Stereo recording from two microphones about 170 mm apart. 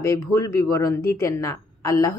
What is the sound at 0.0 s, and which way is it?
A woman's voice, 20° left (ahead or behind).